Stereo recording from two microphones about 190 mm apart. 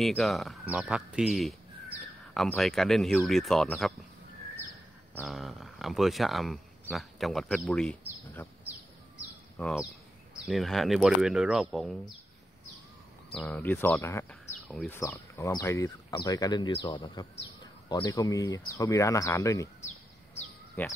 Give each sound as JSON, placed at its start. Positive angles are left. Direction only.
{"t": 0.0, "sound": "speech", "side_deg": 0}
{"t": 5.1, "sound": "speech", "side_deg": 0}
{"t": 9.6, "sound": "speech", "side_deg": 0}
{"t": 13.3, "sound": "speech", "side_deg": 5}
{"t": 14.7, "sound": "speech", "side_deg": 0}
{"t": 15.0, "sound": "speech", "side_deg": 15}
{"t": 20.8, "sound": "speech", "side_deg": 10}